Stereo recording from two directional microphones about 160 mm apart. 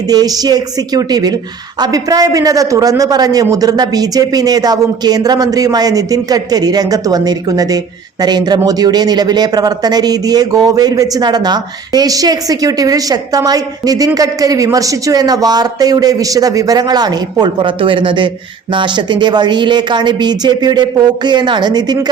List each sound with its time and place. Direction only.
0.1 s speech: 25° right (ahead or behind)